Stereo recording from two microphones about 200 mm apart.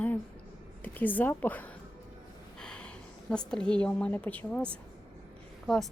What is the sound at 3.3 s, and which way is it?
A woman's voice, 5° left (ahead or behind).